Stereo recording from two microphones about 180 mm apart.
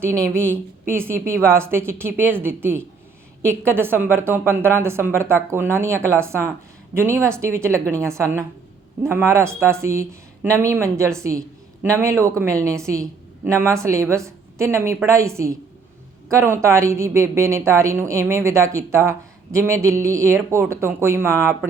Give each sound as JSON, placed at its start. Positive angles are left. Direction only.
{"t": 0.2, "sound": "a woman's voice", "side_deg": -15}